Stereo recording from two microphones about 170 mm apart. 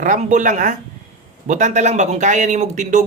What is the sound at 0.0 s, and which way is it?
Speech, 45° right (ahead or behind).